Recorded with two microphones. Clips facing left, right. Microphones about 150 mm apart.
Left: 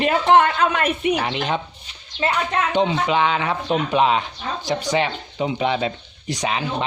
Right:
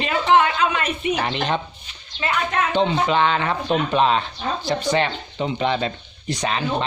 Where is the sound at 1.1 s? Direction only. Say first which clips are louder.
Even; 5° left (ahead or behind).